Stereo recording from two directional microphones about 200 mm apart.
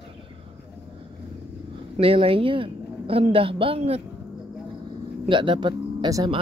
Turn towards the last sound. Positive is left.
turn(degrees=-20)  # may be behind; listen again after turning